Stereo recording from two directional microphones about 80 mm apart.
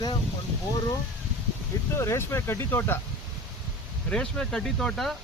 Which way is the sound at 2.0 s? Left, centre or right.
Left.